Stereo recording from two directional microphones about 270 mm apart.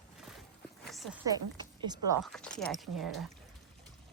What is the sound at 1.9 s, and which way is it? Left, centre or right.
Speech, centre.